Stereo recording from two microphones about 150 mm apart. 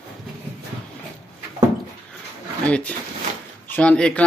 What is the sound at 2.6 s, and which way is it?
Speech, 10° left (ahead or behind).